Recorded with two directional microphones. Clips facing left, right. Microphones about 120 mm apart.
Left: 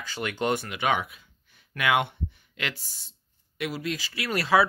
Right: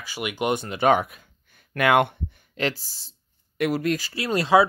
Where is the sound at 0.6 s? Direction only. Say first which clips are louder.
Right 7 dB; 40° right (ahead or behind).